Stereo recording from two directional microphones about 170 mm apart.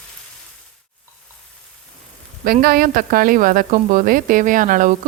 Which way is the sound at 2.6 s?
60° right (ahead or behind).